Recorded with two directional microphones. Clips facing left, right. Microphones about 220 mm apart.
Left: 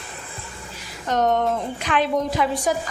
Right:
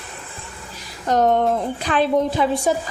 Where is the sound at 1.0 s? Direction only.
35° right (ahead or behind).